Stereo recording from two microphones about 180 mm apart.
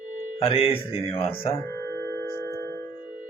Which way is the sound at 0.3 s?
30° left (ahead or behind).